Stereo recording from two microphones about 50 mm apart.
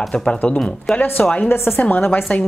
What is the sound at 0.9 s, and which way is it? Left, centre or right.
Speech, centre.